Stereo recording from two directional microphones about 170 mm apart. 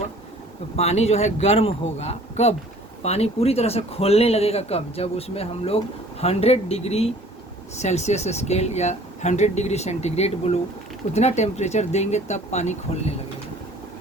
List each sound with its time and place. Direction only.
0.8 s speech: 40° left (ahead or behind)